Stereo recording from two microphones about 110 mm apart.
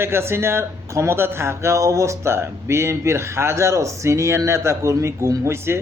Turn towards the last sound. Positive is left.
turn(degrees=-25)  # may be behind; listen again after turning